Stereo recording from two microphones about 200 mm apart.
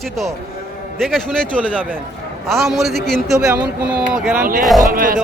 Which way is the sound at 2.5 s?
Centre (ahead or behind).